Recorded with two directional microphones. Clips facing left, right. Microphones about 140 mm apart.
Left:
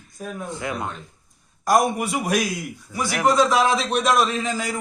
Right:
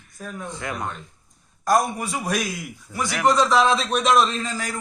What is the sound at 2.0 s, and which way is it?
A man's voice, 15° left (ahead or behind).